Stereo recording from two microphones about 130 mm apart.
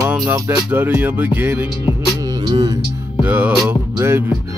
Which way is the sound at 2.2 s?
35° right (ahead or behind).